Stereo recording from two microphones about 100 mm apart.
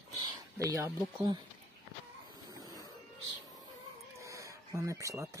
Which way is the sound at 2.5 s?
35° right (ahead or behind).